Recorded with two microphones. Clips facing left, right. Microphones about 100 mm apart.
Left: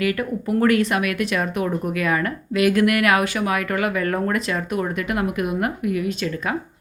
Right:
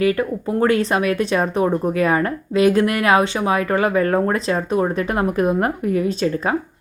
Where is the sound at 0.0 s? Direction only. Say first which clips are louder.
Right 4 dB; 30° right (ahead or behind).